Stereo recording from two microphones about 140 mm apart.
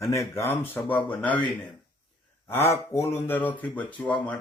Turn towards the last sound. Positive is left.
turn(degrees=10)  # may be behind; listen again after turning